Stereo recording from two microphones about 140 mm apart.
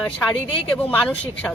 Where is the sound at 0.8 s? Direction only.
10° left (ahead or behind).